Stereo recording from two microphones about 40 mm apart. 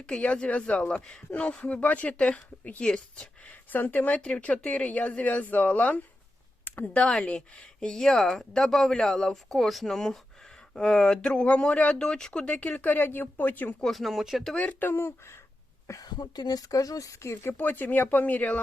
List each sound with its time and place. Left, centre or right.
0.0 s speech: left
1.3 s speech: left
2.8 s speech: left
3.8 s speech: left
4.2 s speech: left
6.7 s speech: left
6.9 s speech: left
8.1 s speech: centre; by 11.9 s left
11.9 s speech: centre
12.5 s speech: left
13.8 s speech: centre
14.6 s speech: left
17.4 s speech: left